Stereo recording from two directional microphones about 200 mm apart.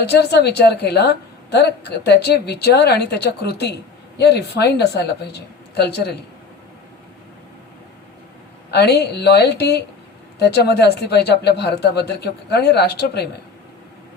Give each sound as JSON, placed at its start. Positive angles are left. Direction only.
{"t": 0.0, "sound": "a woman's voice", "side_deg": 55}
{"t": 8.7, "sound": "a woman's voice", "side_deg": 55}